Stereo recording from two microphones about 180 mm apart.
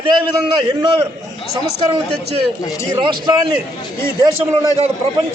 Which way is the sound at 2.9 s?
25° right (ahead or behind).